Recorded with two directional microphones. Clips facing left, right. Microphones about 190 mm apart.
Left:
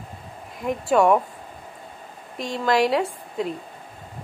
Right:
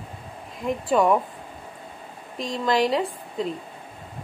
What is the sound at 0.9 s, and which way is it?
Speech, centre (ahead or behind).